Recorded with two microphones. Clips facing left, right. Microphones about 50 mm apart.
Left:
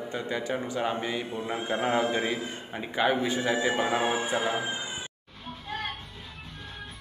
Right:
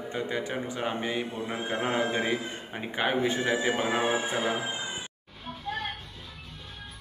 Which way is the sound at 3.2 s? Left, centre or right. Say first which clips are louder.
Even; right.